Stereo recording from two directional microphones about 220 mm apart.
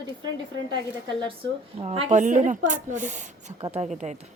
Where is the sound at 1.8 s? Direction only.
25° right (ahead or behind).